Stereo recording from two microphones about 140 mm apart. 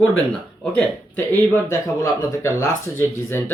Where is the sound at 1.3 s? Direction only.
15° left (ahead or behind).